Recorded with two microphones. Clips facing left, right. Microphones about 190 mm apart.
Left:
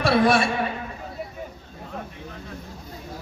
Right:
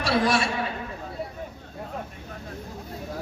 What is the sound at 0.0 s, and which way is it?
Speech, 55° left (ahead or behind).